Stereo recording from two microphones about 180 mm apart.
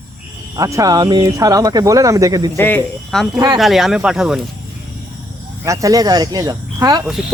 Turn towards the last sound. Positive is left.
turn(degrees=-20)  # may be behind; listen again after turning